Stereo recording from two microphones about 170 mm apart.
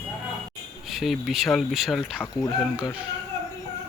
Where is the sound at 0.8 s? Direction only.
Centre (ahead or behind).